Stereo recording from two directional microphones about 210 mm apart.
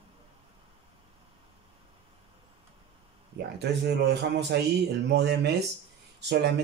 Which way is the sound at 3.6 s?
55° right (ahead or behind).